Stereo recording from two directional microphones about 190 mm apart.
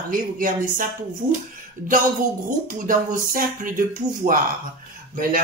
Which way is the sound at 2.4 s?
45° right (ahead or behind).